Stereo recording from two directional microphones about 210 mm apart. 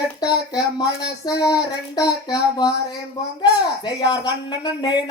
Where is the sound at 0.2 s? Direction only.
20° left (ahead or behind).